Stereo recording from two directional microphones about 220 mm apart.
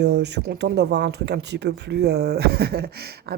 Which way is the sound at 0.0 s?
50° right (ahead or behind).